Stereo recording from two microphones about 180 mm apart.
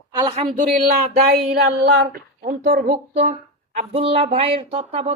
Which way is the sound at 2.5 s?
45° right (ahead or behind).